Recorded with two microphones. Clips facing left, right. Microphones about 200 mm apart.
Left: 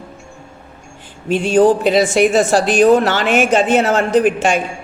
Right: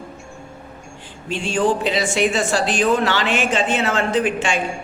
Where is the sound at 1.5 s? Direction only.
40° left (ahead or behind).